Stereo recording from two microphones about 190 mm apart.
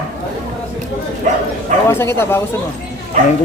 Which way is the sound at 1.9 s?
10° left (ahead or behind).